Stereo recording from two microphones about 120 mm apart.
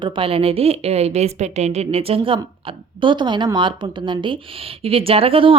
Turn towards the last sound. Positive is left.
turn(degrees=-50)  # may be behind; listen again after turning